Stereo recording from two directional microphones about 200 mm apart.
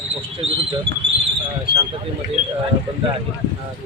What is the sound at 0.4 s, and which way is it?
Speech, 30° right (ahead or behind).